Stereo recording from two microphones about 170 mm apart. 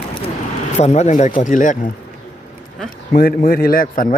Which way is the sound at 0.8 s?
45° left (ahead or behind).